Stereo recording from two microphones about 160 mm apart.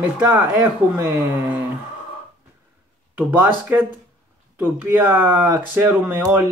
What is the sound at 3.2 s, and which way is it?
Speech, 10° right (ahead or behind).